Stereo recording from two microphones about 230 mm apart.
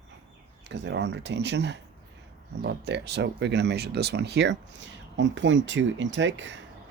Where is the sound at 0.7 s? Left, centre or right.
Right.